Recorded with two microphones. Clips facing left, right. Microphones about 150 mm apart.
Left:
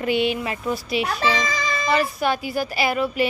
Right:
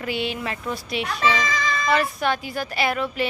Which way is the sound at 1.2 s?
35° left (ahead or behind).